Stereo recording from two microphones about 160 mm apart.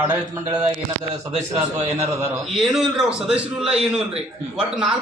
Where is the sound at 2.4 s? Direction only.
Centre (ahead or behind).